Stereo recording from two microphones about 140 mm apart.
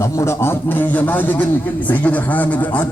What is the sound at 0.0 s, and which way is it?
A man's voice, 20° left (ahead or behind).